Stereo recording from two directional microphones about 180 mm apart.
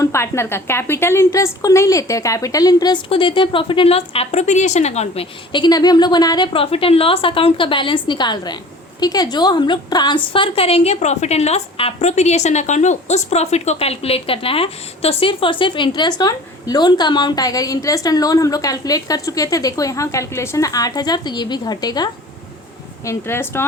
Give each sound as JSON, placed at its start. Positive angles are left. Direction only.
{"t": 0.0, "sound": "a woman's voice", "side_deg": 15}